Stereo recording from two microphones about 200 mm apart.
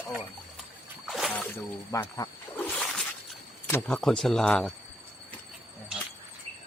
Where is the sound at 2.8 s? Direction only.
Centre (ahead or behind).